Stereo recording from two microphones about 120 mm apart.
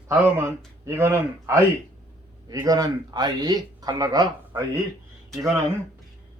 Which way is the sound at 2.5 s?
30° right (ahead or behind).